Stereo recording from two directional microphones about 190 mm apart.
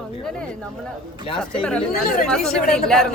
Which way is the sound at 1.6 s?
5° left (ahead or behind).